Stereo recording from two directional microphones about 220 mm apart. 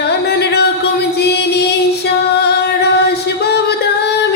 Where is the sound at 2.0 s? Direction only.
50° left (ahead or behind).